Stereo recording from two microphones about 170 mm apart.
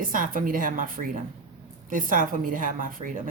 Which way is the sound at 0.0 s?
55° right (ahead or behind).